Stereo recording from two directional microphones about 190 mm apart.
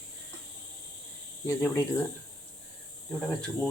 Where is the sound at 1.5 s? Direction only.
15° left (ahead or behind).